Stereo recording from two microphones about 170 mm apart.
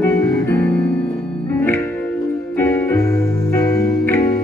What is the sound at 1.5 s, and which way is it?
Music, 10° left (ahead or behind).